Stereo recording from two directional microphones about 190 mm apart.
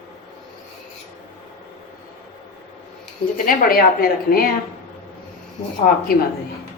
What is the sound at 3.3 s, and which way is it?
A woman's voice, 45° left (ahead or behind).